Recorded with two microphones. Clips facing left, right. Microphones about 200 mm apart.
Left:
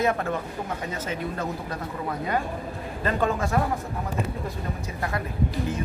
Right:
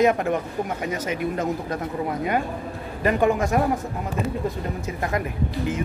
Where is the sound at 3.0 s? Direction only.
15° right (ahead or behind).